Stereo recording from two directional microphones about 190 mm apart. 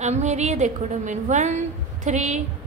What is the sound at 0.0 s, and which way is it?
A woman's voice, 35° right (ahead or behind).